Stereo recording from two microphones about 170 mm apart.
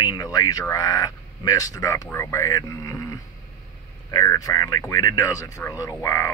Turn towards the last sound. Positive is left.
turn(degrees=20)  # may be behind; listen again after turning